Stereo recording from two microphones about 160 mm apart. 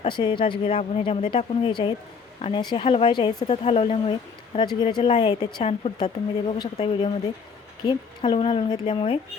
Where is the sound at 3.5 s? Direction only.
40° left (ahead or behind).